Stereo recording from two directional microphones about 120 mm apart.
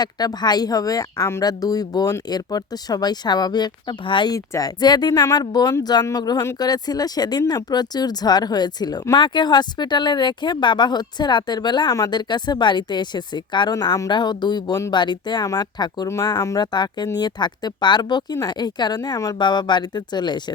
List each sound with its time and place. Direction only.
0.0 s speech: 35° left (ahead or behind)
4.4 s speech: 30° left (ahead or behind)
19.4 s speech: 40° left (ahead or behind)